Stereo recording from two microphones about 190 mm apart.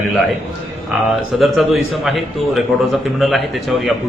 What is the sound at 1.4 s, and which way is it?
A man's voice, centre (ahead or behind).